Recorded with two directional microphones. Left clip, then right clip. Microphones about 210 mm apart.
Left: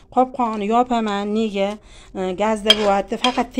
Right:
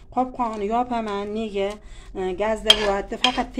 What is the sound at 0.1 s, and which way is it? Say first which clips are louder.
Speech: left 6 dB; 50° left (ahead or behind).